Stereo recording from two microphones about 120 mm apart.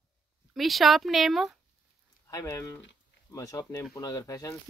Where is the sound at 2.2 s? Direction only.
25° left (ahead or behind).